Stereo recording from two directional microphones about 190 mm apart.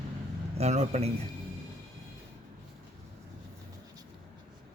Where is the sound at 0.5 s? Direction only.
35° right (ahead or behind).